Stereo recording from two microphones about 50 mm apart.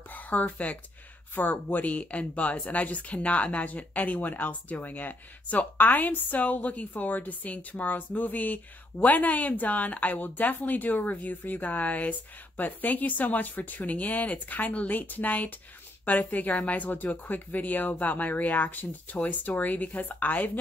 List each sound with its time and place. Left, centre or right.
0.1 s a woman's voice: left